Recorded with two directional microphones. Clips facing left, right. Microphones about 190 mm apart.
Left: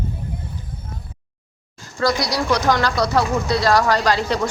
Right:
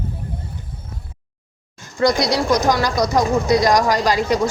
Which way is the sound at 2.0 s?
20° right (ahead or behind).